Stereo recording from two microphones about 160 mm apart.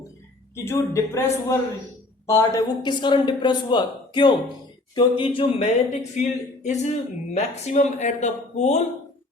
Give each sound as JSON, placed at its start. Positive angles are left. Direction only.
{"t": 0.5, "sound": "a man's voice", "side_deg": 15}